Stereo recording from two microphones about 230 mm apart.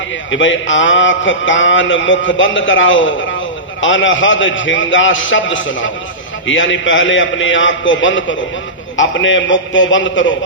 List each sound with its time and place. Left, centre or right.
0.3 s a man's voice: left